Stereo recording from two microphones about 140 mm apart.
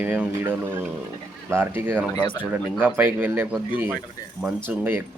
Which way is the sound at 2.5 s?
15° right (ahead or behind).